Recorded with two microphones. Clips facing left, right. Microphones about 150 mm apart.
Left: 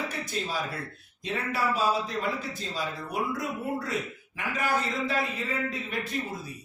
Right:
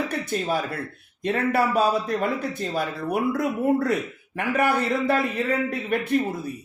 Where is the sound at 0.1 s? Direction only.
60° right (ahead or behind).